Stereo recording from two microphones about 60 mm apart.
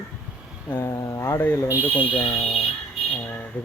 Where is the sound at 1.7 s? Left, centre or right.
Right.